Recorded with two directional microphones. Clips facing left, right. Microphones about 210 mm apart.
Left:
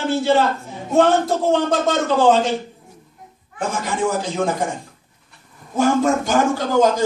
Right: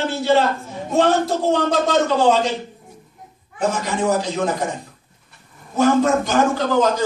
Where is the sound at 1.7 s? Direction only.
50° left (ahead or behind).